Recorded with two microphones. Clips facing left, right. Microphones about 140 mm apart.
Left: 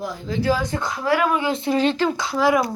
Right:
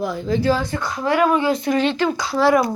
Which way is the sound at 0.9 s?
5° left (ahead or behind).